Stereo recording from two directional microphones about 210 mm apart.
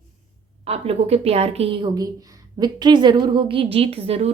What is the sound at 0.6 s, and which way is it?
A woman's voice, 30° right (ahead or behind).